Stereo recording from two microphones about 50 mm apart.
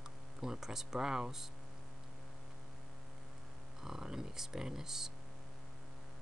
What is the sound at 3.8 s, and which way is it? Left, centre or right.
Speech, centre.